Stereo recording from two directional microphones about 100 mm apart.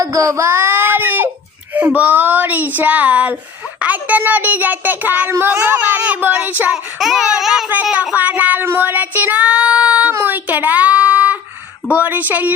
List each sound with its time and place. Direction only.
0.0 s baby cry: 35° right (ahead or behind); by 1.3 s 20° right (ahead or behind)
1.7 s speech: 15° right (ahead or behind)
7.0 s a sound: centre (ahead or behind)
8.1 s child singing: 15° right (ahead or behind)
11.9 s speech: 15° right (ahead or behind)